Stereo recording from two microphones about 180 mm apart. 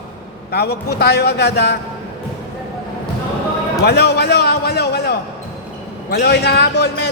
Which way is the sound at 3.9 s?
65° left (ahead or behind).